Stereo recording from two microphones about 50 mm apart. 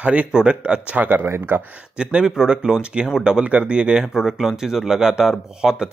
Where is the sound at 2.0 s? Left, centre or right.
Centre.